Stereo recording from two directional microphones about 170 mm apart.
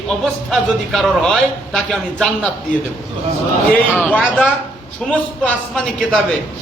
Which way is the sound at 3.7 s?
10° left (ahead or behind).